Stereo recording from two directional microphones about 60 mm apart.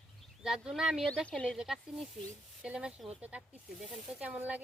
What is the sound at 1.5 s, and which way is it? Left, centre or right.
Speech, centre.